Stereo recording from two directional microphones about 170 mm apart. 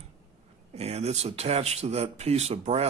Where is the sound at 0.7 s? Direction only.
40° right (ahead or behind).